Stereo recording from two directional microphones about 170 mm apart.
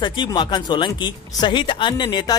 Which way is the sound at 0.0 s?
25° left (ahead or behind).